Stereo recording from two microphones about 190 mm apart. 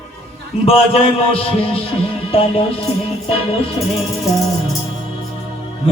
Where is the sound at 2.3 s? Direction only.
30° left (ahead or behind).